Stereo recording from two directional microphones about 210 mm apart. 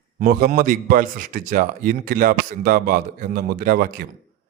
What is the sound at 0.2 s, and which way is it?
A man's voice, 45° right (ahead or behind).